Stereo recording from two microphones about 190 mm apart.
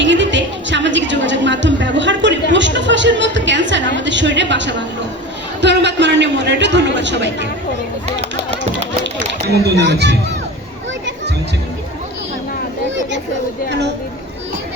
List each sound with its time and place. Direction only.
0.0 s a sound: 70° right (ahead or behind)
5.6 s a man's voice: 65° right (ahead or behind)
9.1 s speech: 60° right (ahead or behind)
13.7 s chatter: 65° right (ahead or behind)